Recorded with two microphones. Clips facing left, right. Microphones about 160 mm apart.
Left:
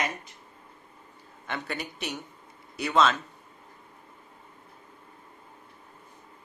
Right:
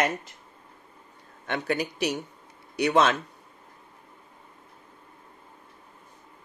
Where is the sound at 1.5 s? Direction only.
75° right (ahead or behind).